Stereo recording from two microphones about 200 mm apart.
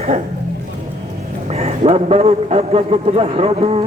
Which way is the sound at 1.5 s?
30° right (ahead or behind).